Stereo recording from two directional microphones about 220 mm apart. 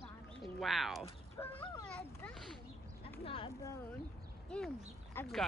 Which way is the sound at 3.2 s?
25° left (ahead or behind).